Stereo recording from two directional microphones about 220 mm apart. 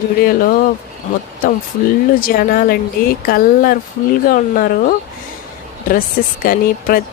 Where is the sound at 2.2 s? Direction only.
40° left (ahead or behind).